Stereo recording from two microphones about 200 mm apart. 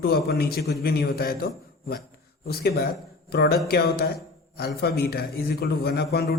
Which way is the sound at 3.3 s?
50° left (ahead or behind).